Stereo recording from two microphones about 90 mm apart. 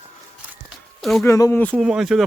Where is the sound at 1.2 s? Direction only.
30° left (ahead or behind).